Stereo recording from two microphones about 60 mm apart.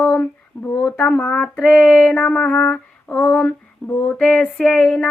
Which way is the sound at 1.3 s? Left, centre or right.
Centre.